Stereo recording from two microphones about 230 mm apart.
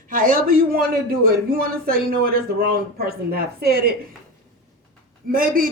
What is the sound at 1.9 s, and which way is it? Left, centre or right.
Speech, right.